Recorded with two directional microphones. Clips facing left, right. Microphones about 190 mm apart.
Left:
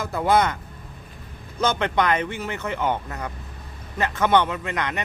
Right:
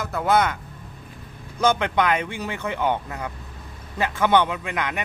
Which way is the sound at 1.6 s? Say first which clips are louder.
Right 1 dB; 10° right (ahead or behind).